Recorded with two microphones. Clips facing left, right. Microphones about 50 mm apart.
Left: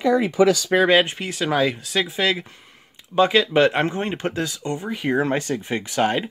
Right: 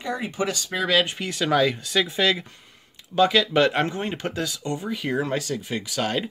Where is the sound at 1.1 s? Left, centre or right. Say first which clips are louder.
Even; centre; by 4.9 s left.